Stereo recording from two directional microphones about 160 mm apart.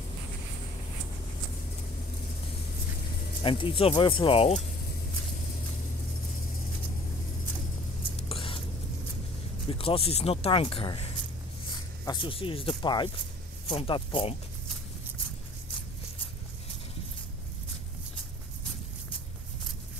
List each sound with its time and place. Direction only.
3.4 s speech: 35° left (ahead or behind)
8.3 s a sound: 35° left (ahead or behind)
9.7 s speech: 35° left (ahead or behind)